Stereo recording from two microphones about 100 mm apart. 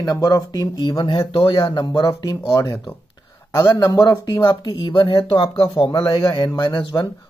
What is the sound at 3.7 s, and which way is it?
Speech, 30° left (ahead or behind).